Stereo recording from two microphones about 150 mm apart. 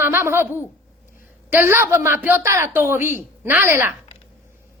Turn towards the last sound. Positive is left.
turn(degrees=-15)  # may be behind; listen again after turning